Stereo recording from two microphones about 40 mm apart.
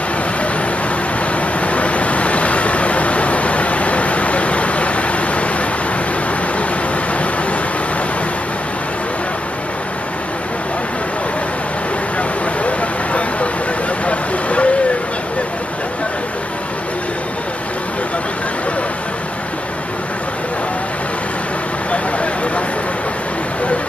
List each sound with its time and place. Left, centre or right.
1.6 s vehicle: left
12.2 s a sound: left
14.0 s vehicle: left